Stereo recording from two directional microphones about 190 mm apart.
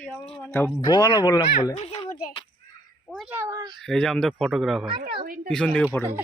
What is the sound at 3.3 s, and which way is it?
Speech, 15° right (ahead or behind).